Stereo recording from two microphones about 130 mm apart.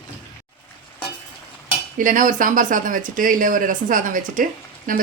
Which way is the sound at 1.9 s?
90° right.